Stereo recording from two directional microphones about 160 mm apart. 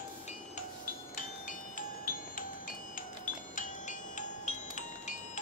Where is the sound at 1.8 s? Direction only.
55° left (ahead or behind).